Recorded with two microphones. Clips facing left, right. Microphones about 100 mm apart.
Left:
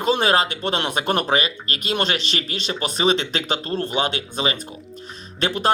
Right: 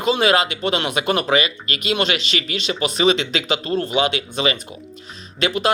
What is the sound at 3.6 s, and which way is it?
Speech, 10° right (ahead or behind).